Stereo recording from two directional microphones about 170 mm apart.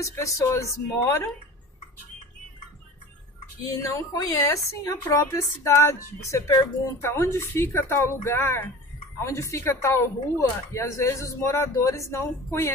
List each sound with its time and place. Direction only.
0.0 s speech: 20° left (ahead or behind)
3.6 s a woman's voice: 20° left (ahead or behind)